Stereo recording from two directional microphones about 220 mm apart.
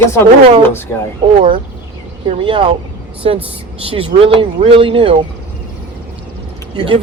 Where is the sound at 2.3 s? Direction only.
25° right (ahead or behind).